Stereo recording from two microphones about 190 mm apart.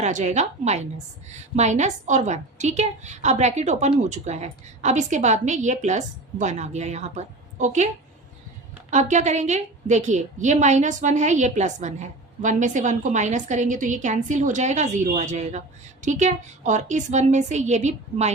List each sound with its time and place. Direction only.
0.0 s a woman's voice: 40° right (ahead or behind)
8.9 s a woman's voice: 40° right (ahead or behind)